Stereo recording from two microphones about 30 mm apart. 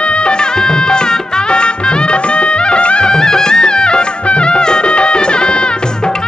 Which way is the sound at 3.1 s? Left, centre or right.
Left.